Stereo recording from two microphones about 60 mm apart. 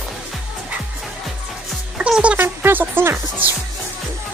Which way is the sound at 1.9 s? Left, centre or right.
Centre.